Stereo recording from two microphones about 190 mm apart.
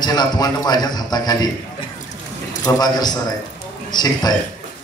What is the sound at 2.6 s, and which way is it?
A man's voice, 20° left (ahead or behind).